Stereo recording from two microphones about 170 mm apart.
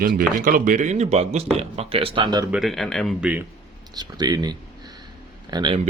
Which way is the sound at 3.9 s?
25° right (ahead or behind).